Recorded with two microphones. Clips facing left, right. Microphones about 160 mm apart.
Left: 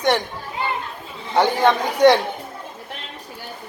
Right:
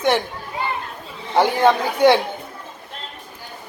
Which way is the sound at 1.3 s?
5° right (ahead or behind).